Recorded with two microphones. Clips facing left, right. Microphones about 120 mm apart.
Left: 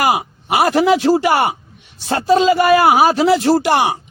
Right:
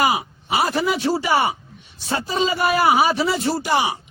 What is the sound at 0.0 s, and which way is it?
Speech, 60° left (ahead or behind).